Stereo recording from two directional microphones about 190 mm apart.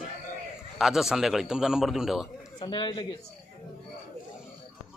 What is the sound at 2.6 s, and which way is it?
Speech, 25° left (ahead or behind).